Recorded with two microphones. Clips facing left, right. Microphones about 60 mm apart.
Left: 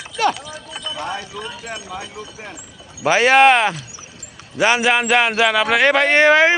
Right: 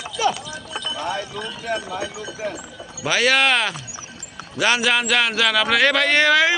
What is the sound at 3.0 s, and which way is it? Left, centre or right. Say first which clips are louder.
A man's voice: left 6 dB; left.